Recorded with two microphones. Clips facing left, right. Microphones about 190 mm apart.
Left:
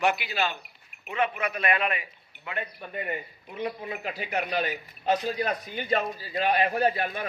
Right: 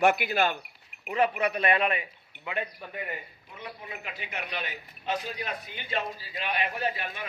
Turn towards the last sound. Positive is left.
turn(degrees=40)  # may be behind; listen again after turning